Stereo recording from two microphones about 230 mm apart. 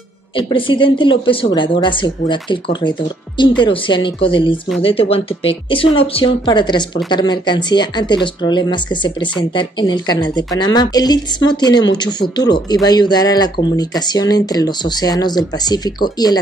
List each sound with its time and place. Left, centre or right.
0.4 s speech: left